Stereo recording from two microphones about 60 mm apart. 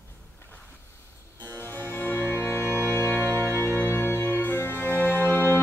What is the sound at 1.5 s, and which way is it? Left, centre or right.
Music, left.